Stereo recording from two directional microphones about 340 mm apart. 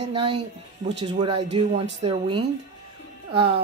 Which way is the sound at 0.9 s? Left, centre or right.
Centre.